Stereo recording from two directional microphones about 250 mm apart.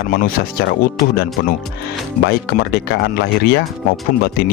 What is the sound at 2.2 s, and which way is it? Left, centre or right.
Speech, left.